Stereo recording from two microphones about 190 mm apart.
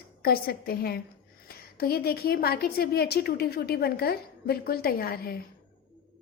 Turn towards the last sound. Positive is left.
turn(degrees=55)  # may be behind; listen again after turning